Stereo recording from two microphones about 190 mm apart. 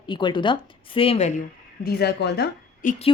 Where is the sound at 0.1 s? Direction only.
25° left (ahead or behind).